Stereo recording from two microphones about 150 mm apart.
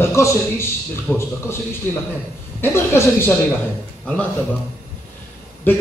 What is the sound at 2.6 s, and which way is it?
Speech, 15° left (ahead or behind).